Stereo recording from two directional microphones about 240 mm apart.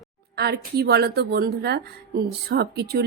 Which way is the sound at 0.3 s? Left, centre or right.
Right.